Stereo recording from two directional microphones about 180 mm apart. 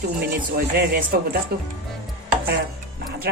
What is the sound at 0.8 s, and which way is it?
Speech, 55° right (ahead or behind).